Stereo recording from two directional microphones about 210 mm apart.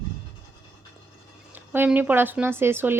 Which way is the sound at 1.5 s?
10° right (ahead or behind).